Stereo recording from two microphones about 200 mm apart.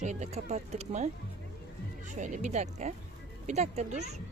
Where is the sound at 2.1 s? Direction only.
40° right (ahead or behind).